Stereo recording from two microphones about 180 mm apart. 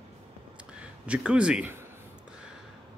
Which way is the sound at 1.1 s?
5° right (ahead or behind).